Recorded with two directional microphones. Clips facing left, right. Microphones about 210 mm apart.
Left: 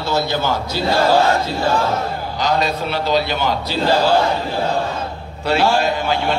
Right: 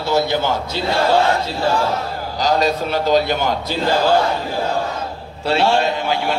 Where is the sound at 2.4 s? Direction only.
40° right (ahead or behind).